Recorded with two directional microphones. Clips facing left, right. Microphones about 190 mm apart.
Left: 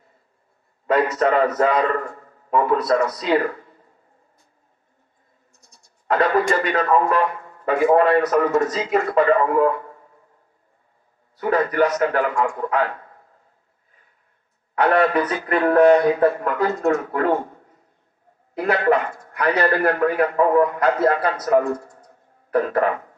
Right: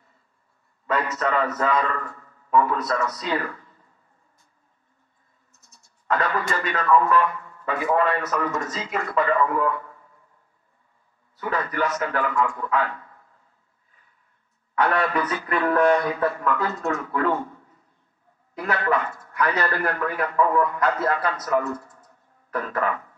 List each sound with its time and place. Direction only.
0.8 s a man's voice: 35° left (ahead or behind)
3.3 s a sound: 40° left (ahead or behind)
6.0 s a man's voice: 35° left (ahead or behind)
11.3 s speech: 45° left (ahead or behind)
14.8 s speech: 45° left (ahead or behind)
21.5 s a sound: 50° left (ahead or behind)